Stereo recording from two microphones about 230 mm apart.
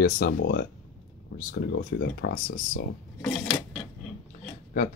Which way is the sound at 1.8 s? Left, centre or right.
Left.